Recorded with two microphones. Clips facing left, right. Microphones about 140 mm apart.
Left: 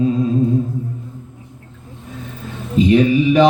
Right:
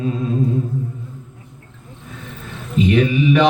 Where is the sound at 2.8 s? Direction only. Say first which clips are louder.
Left 3 dB; 35° left (ahead or behind).